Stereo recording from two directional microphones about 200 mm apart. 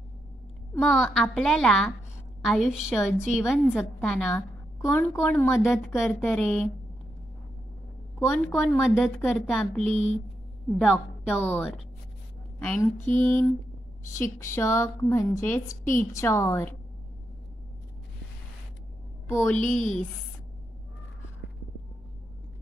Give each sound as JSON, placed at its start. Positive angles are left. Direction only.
{"t": 0.7, "sound": "a woman's voice", "side_deg": 0}
{"t": 8.5, "sound": "a woman's voice", "side_deg": 10}
{"t": 12.7, "sound": "a sound", "side_deg": 40}
{"t": 13.2, "sound": "a woman's voice", "side_deg": 10}
{"t": 19.2, "sound": "a woman's voice", "side_deg": 10}
{"t": 19.6, "sound": "a sound", "side_deg": 40}